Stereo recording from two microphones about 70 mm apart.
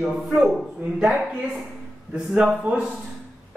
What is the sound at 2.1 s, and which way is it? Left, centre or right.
Speech, centre.